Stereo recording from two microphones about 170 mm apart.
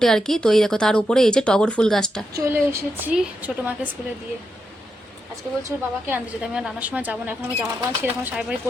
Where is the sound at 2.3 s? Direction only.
15° right (ahead or behind).